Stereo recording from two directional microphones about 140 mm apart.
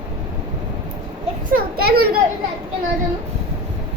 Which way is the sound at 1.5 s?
90° right.